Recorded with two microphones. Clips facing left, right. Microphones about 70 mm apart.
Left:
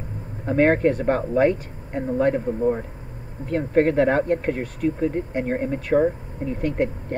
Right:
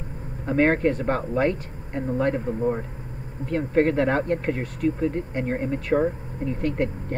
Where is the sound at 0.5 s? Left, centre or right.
Centre.